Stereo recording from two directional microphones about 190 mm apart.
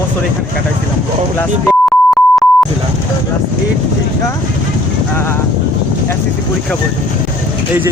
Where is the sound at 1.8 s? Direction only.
5° left (ahead or behind).